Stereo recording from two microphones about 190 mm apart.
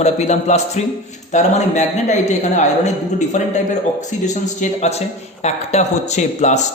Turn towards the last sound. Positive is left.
turn(degrees=35)  # may be behind; listen again after turning